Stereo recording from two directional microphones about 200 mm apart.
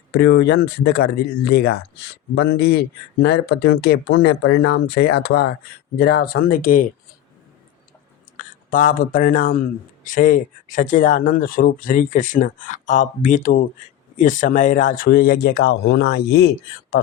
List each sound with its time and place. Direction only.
0.1 s speech: 55° left (ahead or behind)
8.7 s speech: 40° left (ahead or behind)